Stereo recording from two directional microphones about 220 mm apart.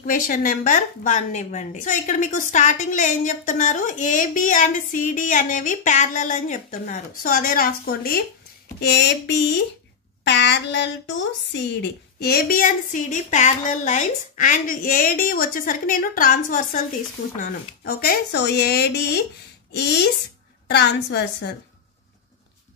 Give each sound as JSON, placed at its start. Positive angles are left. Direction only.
{"t": 0.0, "sound": "a woman's voice", "side_deg": 40}